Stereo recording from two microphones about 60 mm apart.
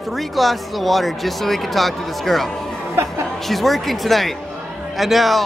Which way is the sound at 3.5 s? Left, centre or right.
Centre.